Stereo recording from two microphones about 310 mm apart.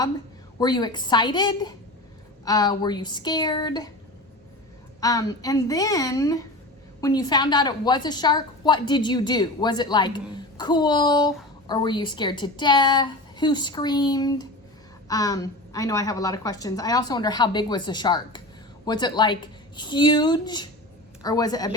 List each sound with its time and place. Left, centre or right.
0.6 s a woman's voice: centre
4.9 s a woman's voice: centre